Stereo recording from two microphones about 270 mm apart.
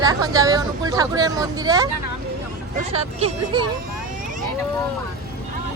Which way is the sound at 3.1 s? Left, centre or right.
Right.